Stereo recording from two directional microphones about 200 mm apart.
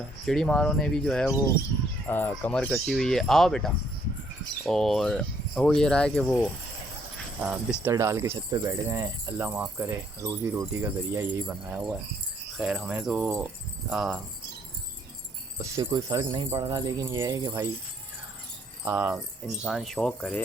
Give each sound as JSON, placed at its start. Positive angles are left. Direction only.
{"t": 0.3, "sound": "speech", "side_deg": 5}
{"t": 7.4, "sound": "speech", "side_deg": -10}
{"t": 15.5, "sound": "speech", "side_deg": -20}
{"t": 18.9, "sound": "speech", "side_deg": -10}